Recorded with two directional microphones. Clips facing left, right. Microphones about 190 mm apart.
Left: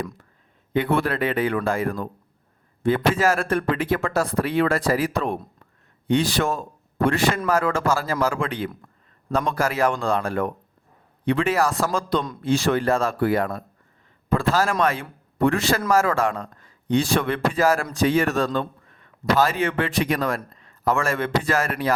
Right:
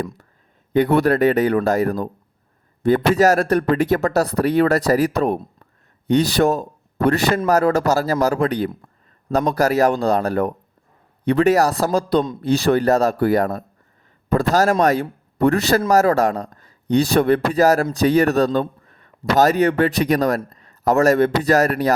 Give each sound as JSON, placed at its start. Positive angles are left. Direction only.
{"t": 0.7, "sound": "a man's voice", "side_deg": -40}